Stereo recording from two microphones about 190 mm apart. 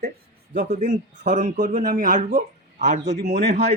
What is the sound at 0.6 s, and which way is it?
Speech, 40° right (ahead or behind).